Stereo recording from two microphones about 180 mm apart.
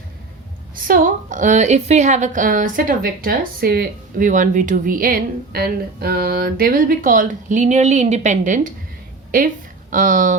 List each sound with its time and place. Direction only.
0.9 s a woman's voice: 50° right (ahead or behind)
9.9 s a woman's voice: 45° right (ahead or behind)